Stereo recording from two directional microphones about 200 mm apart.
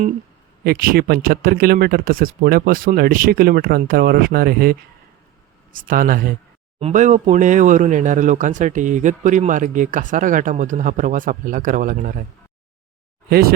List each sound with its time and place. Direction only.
0.6 s speech: 45° right (ahead or behind)
6.7 s speech: 35° right (ahead or behind)